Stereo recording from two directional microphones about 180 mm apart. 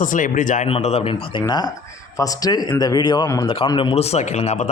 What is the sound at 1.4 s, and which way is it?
Speech, 20° left (ahead or behind).